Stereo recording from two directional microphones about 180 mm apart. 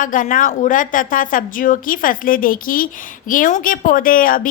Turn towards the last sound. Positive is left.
turn(degrees=50)  # may be behind; listen again after turning